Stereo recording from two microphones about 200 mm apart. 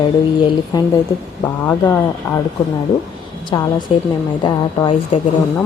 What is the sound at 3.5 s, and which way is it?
Speech, 25° left (ahead or behind).